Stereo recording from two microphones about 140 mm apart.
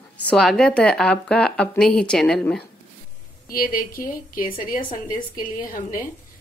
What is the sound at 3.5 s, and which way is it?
A woman's voice, 90° left.